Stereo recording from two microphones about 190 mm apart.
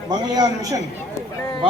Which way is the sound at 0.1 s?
20° right (ahead or behind).